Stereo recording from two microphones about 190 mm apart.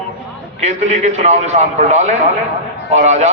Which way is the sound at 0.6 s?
35° right (ahead or behind).